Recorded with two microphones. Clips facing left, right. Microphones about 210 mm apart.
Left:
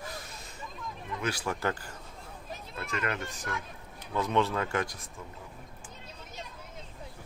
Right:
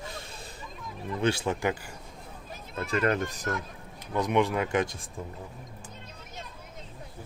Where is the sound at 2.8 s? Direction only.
35° right (ahead or behind).